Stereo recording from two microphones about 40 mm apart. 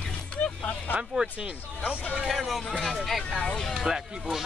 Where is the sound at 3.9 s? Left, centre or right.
Centre.